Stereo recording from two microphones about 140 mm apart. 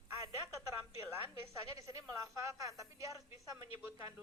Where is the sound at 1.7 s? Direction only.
25° right (ahead or behind).